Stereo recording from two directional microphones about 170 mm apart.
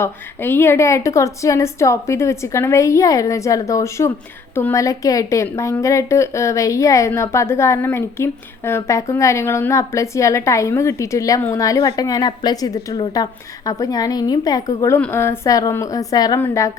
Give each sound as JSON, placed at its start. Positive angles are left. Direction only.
{"t": 0.0, "sound": "a woman's voice", "side_deg": 15}